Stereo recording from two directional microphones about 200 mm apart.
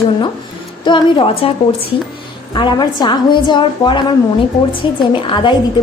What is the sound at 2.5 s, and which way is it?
A woman's voice, 25° left (ahead or behind).